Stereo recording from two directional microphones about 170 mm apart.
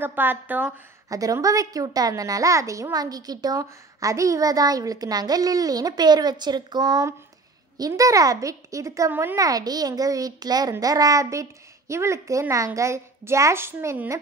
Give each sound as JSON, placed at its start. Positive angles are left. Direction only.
{"t": 0.0, "sound": "a woman's voice", "side_deg": -10}